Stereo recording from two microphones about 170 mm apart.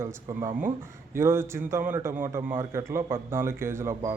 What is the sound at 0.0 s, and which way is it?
A man's voice, 15° right (ahead or behind).